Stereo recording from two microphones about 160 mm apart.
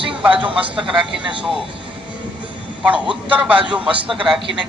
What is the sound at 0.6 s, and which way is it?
Speech, 5° right (ahead or behind).